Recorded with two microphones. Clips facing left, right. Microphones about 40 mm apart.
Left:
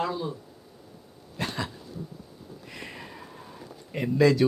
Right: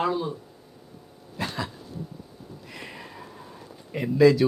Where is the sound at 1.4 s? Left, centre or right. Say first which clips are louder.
Right 1 dB; centre.